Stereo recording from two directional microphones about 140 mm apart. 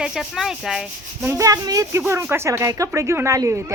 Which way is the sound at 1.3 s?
25° right (ahead or behind).